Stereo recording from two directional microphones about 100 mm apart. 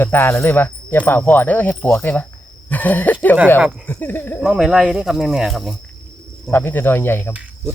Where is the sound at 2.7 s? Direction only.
15° left (ahead or behind).